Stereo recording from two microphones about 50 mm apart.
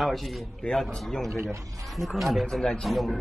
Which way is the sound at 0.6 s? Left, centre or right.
Left.